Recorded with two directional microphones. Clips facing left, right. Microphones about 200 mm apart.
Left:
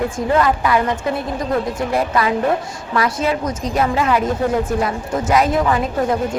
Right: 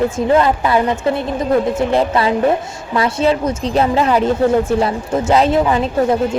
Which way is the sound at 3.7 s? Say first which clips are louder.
Right 3 dB; 30° right (ahead or behind).